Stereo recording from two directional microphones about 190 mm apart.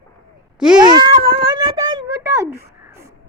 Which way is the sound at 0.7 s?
20° right (ahead or behind).